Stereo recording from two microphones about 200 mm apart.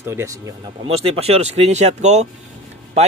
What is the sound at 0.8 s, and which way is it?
A man's voice, 25° right (ahead or behind).